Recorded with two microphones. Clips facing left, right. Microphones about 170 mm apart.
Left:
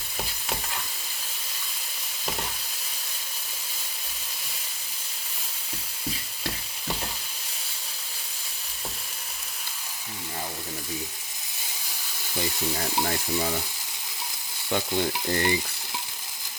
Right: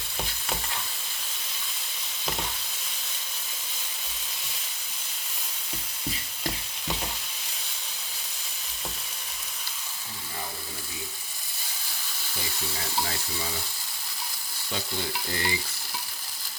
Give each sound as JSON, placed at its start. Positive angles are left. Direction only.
{"t": 14.7, "sound": "stir", "side_deg": 55}